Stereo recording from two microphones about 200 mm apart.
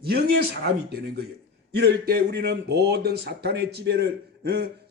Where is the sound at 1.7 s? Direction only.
55° right (ahead or behind).